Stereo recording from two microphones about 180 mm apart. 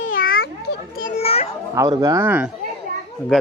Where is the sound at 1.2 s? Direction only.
35° left (ahead or behind).